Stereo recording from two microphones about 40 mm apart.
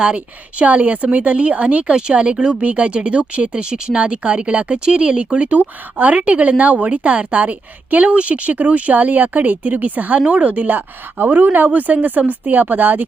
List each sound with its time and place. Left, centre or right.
0.6 s speech: right
1.9 s speech: right
5.5 s speech: right
10.7 s a woman's voice: right